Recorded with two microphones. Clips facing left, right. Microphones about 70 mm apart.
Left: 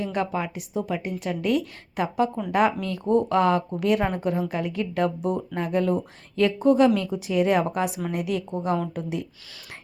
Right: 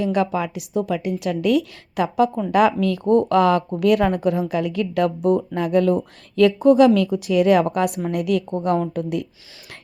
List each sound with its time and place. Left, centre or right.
0.0 s a woman's voice: right
2.5 s a woman's voice: right